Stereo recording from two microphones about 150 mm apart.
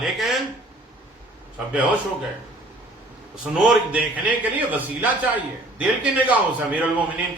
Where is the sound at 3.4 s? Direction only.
5° right (ahead or behind).